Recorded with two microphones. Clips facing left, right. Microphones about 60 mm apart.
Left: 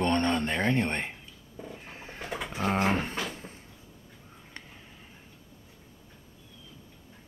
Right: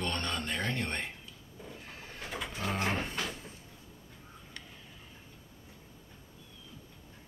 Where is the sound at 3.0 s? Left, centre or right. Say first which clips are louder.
Left 3 dB; left.